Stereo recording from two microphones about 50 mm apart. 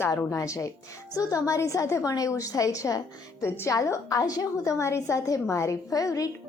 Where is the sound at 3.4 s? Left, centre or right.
Left.